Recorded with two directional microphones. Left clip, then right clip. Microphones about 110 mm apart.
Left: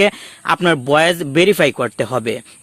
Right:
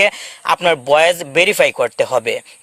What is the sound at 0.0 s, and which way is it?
Speech, 35° right (ahead or behind).